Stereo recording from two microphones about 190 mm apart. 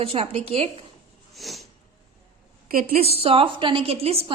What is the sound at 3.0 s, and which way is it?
A woman's voice, 30° right (ahead or behind).